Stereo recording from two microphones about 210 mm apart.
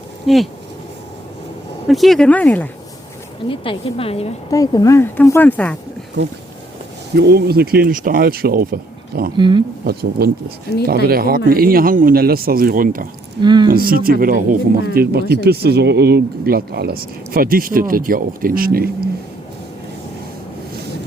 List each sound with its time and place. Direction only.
0.3 s speech: centre (ahead or behind)
1.9 s speech: centre (ahead or behind)
3.5 s a woman's voice: 25° left (ahead or behind)
4.5 s speech: 15° left (ahead or behind)
6.2 s speech: 55° right (ahead or behind)
9.4 s speech: 20° right (ahead or behind)
9.8 s speech: 50° right (ahead or behind)
13.4 s speech: 20° right (ahead or behind)
13.7 s speech: 45° right (ahead or behind)